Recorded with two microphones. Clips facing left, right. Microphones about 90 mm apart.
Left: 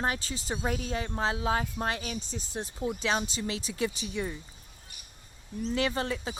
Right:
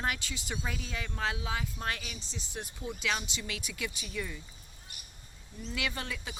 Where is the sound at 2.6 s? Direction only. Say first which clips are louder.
Left 6 dB; 30° left (ahead or behind).